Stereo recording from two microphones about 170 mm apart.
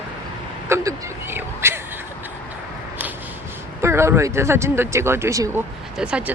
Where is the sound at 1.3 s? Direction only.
15° right (ahead or behind).